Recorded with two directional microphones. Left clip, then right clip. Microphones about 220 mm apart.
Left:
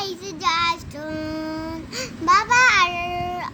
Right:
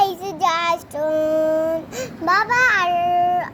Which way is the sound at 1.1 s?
10° left (ahead or behind).